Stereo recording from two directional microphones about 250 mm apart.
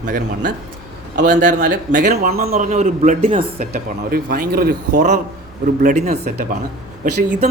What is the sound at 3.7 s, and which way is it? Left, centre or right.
A man's voice, right.